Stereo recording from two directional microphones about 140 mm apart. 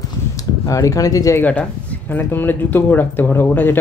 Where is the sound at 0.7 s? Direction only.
25° left (ahead or behind).